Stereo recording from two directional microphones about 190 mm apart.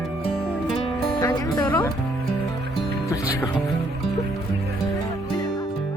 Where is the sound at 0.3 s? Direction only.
5° left (ahead or behind).